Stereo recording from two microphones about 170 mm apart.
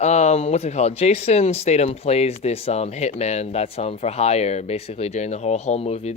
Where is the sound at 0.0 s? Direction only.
40° left (ahead or behind).